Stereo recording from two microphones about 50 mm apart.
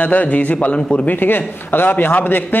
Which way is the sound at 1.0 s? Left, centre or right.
Left.